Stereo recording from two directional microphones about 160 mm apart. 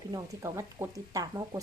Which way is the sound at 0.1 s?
20° right (ahead or behind).